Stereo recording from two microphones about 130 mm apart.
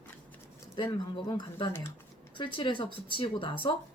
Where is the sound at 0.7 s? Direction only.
35° left (ahead or behind).